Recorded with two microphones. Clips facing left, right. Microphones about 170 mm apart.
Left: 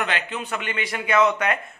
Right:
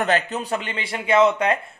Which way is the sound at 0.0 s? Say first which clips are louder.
Right 6 dB; 40° right (ahead or behind).